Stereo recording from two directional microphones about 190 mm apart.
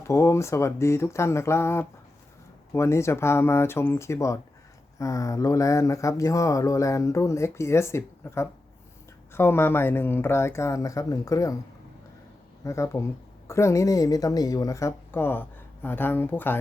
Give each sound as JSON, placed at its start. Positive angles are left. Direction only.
{"t": 0.1, "sound": "speech", "side_deg": 15}
{"t": 12.6, "sound": "speech", "side_deg": 15}